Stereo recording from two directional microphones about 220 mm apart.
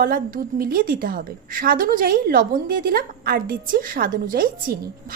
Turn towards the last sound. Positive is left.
turn(degrees=-40)  # may be behind; listen again after turning